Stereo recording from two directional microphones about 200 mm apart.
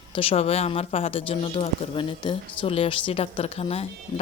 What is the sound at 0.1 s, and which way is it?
Speech, 30° left (ahead or behind).